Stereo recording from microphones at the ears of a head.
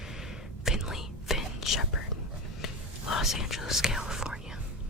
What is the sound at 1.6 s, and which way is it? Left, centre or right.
Whispering, left.